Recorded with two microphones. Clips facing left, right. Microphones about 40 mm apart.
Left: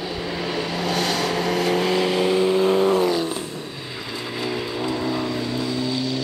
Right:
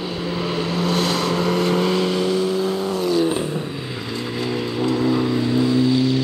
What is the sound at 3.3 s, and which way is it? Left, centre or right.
Vehicle, right.